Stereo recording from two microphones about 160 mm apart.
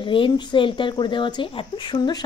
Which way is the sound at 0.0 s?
30° left (ahead or behind).